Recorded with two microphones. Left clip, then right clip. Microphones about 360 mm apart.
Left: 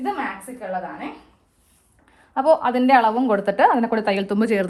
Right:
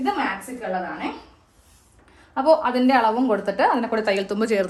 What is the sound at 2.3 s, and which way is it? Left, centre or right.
A woman's voice, centre.